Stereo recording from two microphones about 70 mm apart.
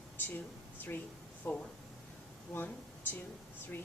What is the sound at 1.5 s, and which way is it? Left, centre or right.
Speech, left.